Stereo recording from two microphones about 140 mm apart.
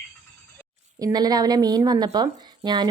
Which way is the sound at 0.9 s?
25° right (ahead or behind).